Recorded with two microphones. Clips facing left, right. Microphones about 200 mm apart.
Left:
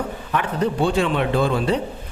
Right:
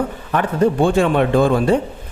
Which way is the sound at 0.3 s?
50° right (ahead or behind).